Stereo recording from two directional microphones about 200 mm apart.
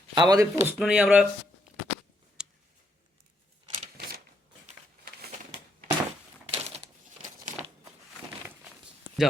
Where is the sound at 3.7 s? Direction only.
45° right (ahead or behind).